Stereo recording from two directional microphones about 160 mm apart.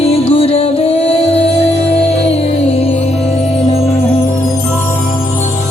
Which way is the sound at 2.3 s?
40° left (ahead or behind).